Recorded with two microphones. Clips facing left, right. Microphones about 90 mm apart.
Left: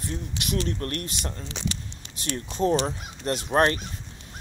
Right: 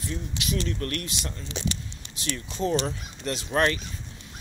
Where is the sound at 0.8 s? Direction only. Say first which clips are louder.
Even; 30° left (ahead or behind).